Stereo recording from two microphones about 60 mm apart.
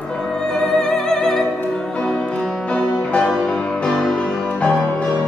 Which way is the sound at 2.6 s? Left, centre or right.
Centre.